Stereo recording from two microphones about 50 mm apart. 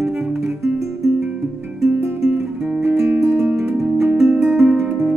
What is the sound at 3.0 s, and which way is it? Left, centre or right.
Music, right.